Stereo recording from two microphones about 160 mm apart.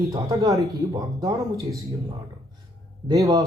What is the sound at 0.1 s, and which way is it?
Speech, 20° right (ahead or behind).